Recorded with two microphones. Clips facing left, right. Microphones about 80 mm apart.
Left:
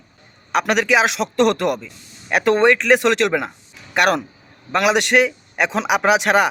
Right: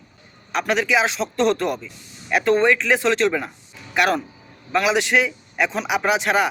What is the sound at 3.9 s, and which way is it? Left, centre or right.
A man's voice, left.